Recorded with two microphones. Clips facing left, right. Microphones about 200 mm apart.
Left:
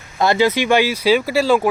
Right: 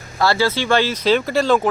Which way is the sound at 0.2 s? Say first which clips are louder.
Left 3 dB; 20° left (ahead or behind).